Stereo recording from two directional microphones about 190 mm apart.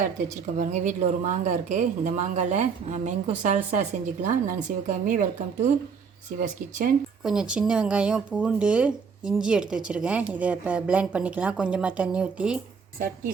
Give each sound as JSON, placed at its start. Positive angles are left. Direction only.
{"t": 0.5, "sound": "speech", "side_deg": -40}
{"t": 7.3, "sound": "speech", "side_deg": -5}